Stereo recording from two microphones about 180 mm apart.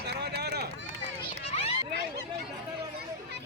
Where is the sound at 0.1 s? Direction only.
65° right (ahead or behind).